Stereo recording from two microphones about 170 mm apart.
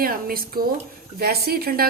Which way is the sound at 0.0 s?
60° right (ahead or behind).